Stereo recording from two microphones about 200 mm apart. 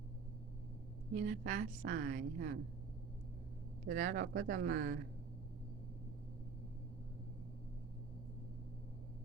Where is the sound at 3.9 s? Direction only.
45° right (ahead or behind).